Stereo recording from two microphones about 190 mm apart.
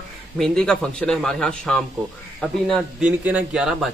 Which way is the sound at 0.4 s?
5° left (ahead or behind).